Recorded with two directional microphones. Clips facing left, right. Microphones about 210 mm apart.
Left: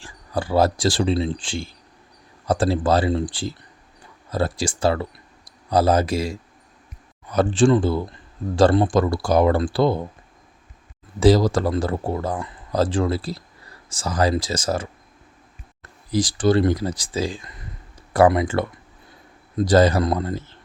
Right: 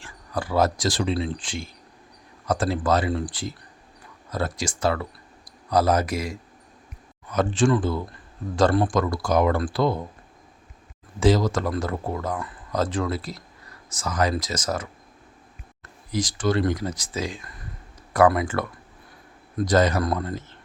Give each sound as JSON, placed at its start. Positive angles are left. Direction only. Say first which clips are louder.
{"t": 0.0, "sound": "speech", "louder": "left 3 dB", "side_deg": 30}
{"t": 11.2, "sound": "speech", "louder": "left 4 dB", "side_deg": 35}
{"t": 16.1, "sound": "speech", "louder": "left 5 dB", "side_deg": 30}